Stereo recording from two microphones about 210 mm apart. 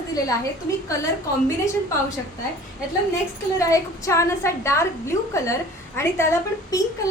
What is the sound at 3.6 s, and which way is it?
A woman's voice, 15° left (ahead or behind).